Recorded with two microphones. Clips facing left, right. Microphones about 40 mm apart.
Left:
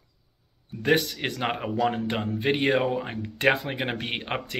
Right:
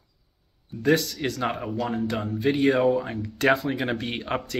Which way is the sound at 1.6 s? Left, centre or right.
Left.